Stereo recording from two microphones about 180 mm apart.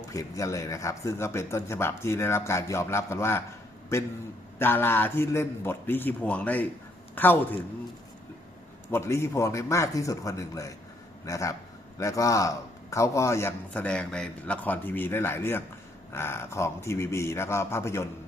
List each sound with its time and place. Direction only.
0.1 s a man's voice: 20° left (ahead or behind)
4.5 s a man's voice: 10° left (ahead or behind)
8.9 s a man's voice: 15° left (ahead or behind)